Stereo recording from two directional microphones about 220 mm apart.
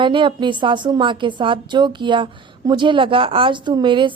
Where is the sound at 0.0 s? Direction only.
20° right (ahead or behind).